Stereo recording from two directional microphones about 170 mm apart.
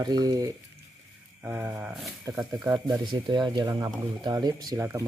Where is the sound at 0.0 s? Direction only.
20° right (ahead or behind).